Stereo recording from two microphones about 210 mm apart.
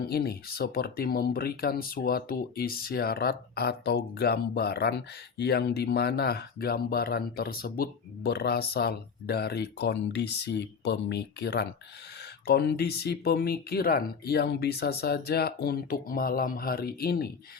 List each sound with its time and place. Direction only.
0.1 s speech: 50° left (ahead or behind)